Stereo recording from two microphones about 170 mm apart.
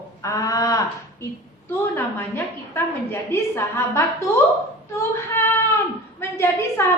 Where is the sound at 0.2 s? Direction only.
20° left (ahead or behind).